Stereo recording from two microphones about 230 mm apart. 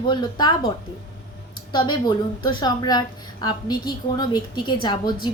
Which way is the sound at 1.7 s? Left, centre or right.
Centre.